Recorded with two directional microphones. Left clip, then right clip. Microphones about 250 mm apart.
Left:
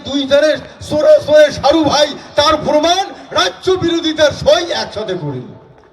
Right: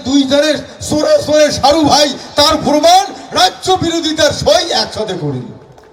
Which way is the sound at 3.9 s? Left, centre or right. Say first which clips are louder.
Even; right.